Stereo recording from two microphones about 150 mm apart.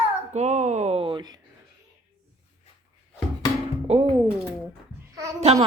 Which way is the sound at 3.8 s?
40° right (ahead or behind).